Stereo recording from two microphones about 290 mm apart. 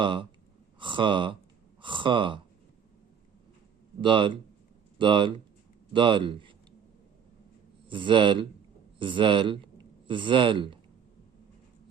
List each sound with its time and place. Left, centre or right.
0.0 s speech: centre
4.0 s speech: centre
7.9 s speech: centre